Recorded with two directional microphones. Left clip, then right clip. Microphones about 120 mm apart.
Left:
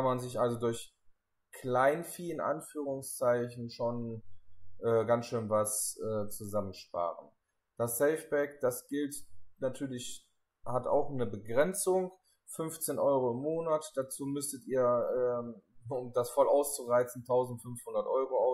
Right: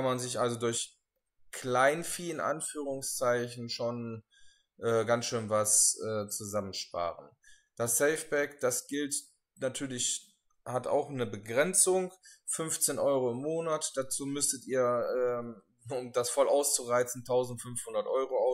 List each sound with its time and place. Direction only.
0.0 s speech: 5° right (ahead or behind)
8.0 s speech: 5° right (ahead or behind)
11.1 s speech: 5° right (ahead or behind)
14.8 s a sound: 25° right (ahead or behind)
15.9 s speech: 5° right (ahead or behind)